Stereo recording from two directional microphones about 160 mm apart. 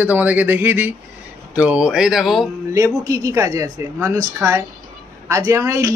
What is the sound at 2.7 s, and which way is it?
Speech, 20° right (ahead or behind).